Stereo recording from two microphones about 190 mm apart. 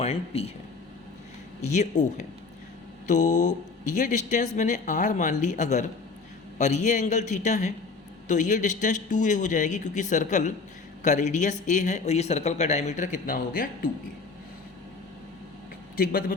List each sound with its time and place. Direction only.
0.0 s speech: 30° left (ahead or behind)
1.6 s speech: 40° left (ahead or behind)